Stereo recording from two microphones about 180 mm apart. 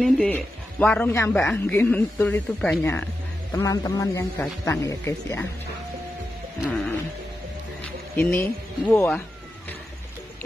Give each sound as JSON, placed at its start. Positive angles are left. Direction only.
{"t": 0.0, "sound": "speech", "side_deg": 5}
{"t": 8.2, "sound": "speech", "side_deg": 10}